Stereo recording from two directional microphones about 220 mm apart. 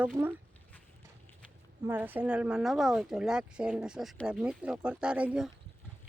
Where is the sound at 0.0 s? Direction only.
10° right (ahead or behind).